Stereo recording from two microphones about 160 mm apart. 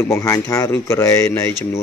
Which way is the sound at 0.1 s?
20° left (ahead or behind).